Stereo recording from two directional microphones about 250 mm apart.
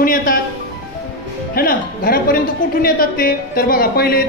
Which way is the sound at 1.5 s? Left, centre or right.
Left.